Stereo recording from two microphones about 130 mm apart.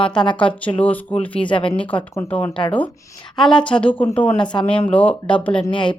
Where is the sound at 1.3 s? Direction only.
40° left (ahead or behind).